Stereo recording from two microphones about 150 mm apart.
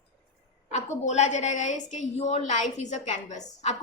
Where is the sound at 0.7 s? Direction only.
50° left (ahead or behind).